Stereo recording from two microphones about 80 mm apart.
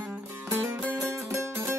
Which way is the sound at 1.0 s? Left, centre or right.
Right.